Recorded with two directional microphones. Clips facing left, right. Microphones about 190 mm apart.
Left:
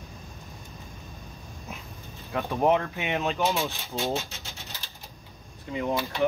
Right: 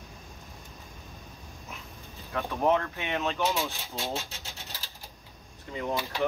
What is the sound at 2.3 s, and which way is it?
Speech, 15° left (ahead or behind).